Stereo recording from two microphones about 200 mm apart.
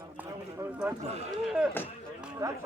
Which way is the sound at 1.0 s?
30° right (ahead or behind).